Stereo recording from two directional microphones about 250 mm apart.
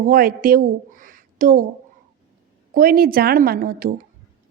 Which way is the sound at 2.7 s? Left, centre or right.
Right.